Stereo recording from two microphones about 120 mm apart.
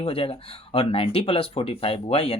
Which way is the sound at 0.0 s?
55° left (ahead or behind).